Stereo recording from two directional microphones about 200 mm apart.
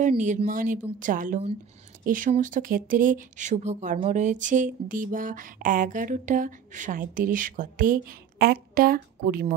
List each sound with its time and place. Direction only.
0.2 s speech: 40° right (ahead or behind)